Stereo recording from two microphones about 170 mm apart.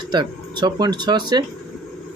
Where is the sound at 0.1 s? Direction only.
25° right (ahead or behind).